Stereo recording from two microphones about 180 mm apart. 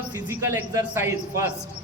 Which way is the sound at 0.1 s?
10° right (ahead or behind).